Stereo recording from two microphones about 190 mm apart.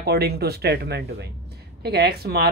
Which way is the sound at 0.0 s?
55° right (ahead or behind).